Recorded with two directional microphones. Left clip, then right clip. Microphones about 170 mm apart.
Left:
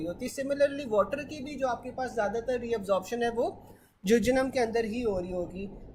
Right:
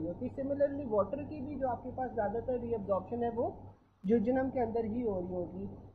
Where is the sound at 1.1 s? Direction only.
25° left (ahead or behind).